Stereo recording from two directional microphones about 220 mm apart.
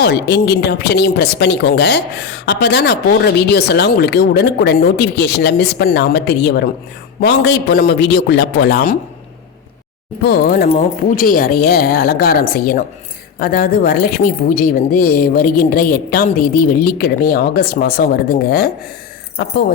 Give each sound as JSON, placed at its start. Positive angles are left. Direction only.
{"t": 0.0, "sound": "speech", "side_deg": 50}
{"t": 10.2, "sound": "a woman's voice", "side_deg": 40}